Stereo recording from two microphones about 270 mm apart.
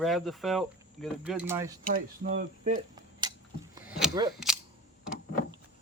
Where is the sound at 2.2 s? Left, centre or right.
Right.